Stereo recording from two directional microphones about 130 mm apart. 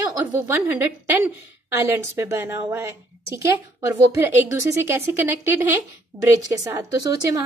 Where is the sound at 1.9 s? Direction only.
20° right (ahead or behind).